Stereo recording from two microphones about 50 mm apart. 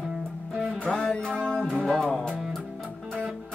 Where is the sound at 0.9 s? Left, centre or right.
Centre.